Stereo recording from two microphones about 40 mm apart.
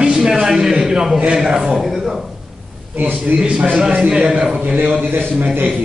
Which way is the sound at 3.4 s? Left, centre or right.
Right.